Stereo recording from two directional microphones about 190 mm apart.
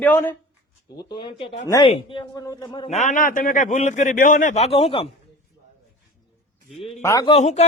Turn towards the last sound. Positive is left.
turn(degrees=35)  # may be behind; listen again after turning